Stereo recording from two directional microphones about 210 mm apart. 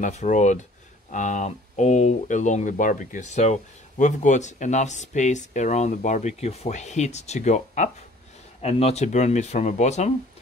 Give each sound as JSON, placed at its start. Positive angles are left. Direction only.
{"t": 0.0, "sound": "speech", "side_deg": 35}